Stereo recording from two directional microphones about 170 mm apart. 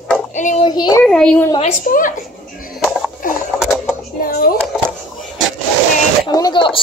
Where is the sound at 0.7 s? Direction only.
25° left (ahead or behind).